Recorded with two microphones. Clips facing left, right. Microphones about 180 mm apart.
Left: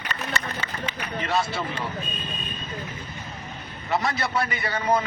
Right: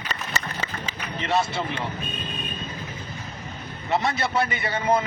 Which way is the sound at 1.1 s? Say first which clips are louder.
Right 2 dB; 25° right (ahead or behind).